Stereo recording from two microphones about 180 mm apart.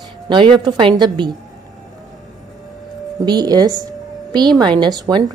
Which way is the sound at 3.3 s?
20° right (ahead or behind).